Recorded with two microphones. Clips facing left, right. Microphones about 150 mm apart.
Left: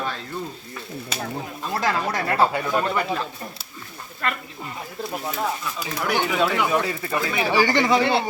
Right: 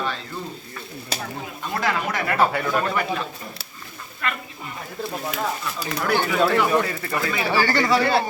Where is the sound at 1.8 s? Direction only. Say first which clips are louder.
Even; 35° left (ahead or behind).